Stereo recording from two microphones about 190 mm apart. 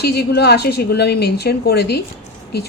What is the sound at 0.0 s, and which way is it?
A woman's voice, 60° left (ahead or behind).